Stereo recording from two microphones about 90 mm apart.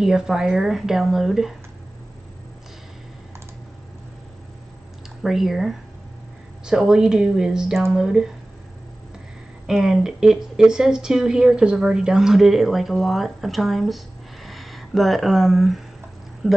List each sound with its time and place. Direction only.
0.0 s speech: 5° right (ahead or behind)
5.2 s speech: 5° right (ahead or behind)
9.7 s speech: 5° right (ahead or behind)